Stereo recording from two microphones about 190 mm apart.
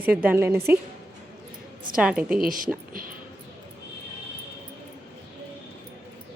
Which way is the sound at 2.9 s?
50° right (ahead or behind).